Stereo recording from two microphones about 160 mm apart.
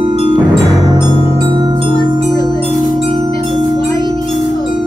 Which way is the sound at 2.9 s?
35° right (ahead or behind).